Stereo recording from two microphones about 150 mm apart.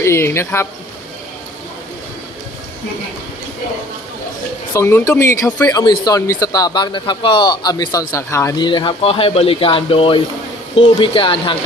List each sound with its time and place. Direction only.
0.0 s speech: 15° left (ahead or behind)
4.7 s a man's voice: 15° left (ahead or behind)
8.5 s speech: 30° left (ahead or behind)